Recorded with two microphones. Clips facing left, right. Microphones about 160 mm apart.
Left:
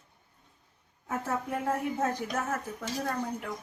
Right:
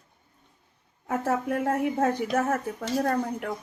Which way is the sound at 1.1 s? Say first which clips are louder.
Right 6 dB; 70° right (ahead or behind).